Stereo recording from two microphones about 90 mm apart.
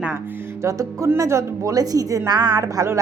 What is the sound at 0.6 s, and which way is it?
Speech, 35° right (ahead or behind).